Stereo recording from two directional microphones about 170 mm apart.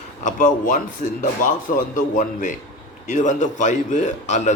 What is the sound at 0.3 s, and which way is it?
A man's voice, 50° left (ahead or behind).